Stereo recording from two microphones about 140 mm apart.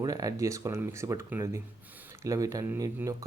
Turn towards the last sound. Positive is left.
turn(degrees=-25)  # may be behind; listen again after turning